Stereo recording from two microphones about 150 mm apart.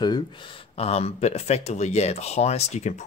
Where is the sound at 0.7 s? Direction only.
45° left (ahead or behind).